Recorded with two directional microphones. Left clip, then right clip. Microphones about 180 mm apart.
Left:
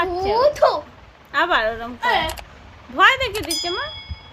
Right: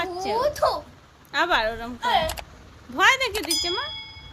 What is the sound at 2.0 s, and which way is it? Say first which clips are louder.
Speech: left 3 dB; 55° left (ahead or behind).